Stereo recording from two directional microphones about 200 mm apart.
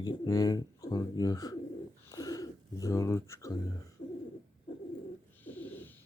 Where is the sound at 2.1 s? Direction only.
20° left (ahead or behind).